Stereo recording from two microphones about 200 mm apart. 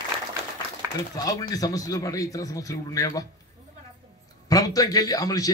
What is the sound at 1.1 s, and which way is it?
Speech, 15° left (ahead or behind).